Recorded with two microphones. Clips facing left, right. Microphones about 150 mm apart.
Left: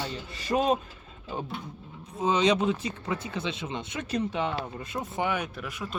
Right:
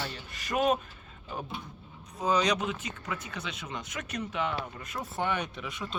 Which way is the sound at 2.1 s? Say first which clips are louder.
Left 3 dB; 25° left (ahead or behind).